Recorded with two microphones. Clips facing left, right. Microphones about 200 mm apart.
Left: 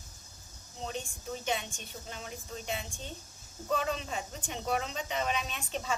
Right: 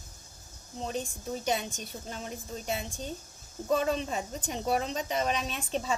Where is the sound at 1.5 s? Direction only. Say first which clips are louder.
Right 4 dB; 40° right (ahead or behind).